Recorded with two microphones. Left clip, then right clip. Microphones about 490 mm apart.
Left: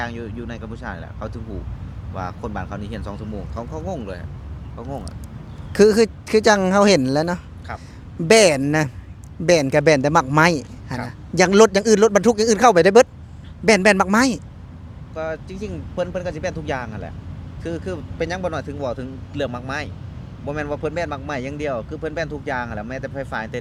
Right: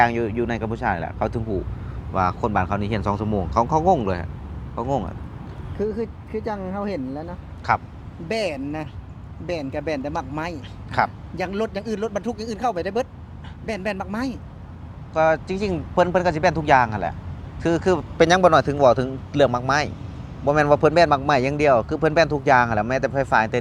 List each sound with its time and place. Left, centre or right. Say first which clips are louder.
0.0 s speech: right 10 dB; right
5.7 s speech: left 12 dB; left
7.7 s speech: right 13 dB; right
8.3 s speech: left 12 dB; left
15.1 s speech: right 9 dB; right